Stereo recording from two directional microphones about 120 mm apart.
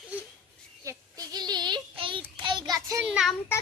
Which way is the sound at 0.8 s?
30° right (ahead or behind).